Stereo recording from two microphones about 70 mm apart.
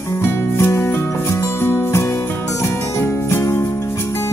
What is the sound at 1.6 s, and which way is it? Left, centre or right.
Music, left.